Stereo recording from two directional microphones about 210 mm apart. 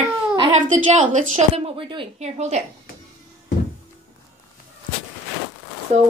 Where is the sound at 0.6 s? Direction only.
35° right (ahead or behind).